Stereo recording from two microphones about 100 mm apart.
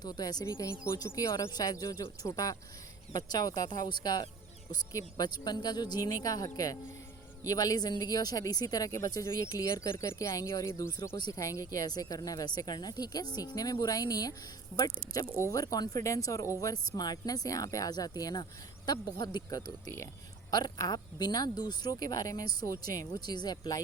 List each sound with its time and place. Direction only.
0.0 s speech: 40° left (ahead or behind)
0.4 s speech: 30° left (ahead or behind); by 4.3 s 45° left (ahead or behind)
4.7 s speech: 35° left (ahead or behind)
15.4 s speech: 35° left (ahead or behind)